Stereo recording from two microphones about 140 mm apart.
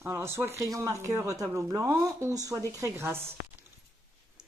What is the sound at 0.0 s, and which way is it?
Speech, 20° right (ahead or behind).